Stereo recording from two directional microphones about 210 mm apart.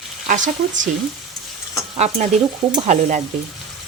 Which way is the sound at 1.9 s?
30° right (ahead or behind).